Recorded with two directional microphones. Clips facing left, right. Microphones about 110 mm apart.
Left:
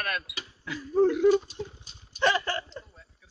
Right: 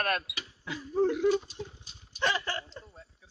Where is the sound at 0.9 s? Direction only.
85° left.